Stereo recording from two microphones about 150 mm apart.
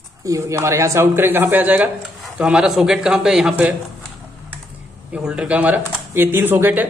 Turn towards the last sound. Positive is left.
turn(degrees=-15)  # may be behind; listen again after turning